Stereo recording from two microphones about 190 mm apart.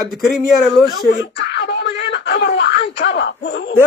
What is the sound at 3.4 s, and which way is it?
Speech, 65° left (ahead or behind).